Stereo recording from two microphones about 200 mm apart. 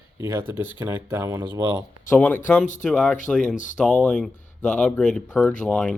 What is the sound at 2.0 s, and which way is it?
Speech, 10° left (ahead or behind).